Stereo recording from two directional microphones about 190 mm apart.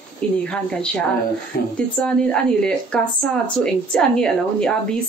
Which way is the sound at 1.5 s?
50° left (ahead or behind).